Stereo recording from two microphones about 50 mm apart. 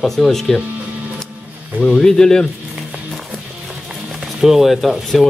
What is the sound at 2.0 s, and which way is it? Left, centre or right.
Speech, centre.